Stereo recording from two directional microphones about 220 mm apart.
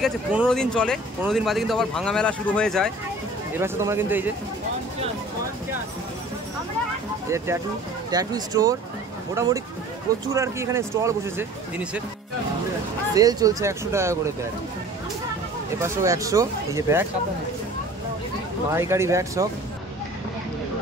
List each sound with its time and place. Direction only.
0.0 s speech: centre (ahead or behind)
3.5 s speech: 10° right (ahead or behind)
7.2 s speech: 15° right (ahead or behind)
13.1 s speech: 15° right (ahead or behind)
15.8 s speech: 15° right (ahead or behind)
18.7 s speech: 10° right (ahead or behind)